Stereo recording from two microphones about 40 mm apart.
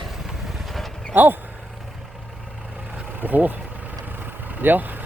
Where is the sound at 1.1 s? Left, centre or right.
Right.